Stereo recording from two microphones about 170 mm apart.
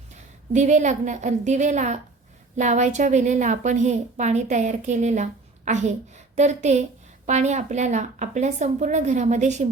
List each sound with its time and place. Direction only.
0.1 s a woman's voice: 45° right (ahead or behind)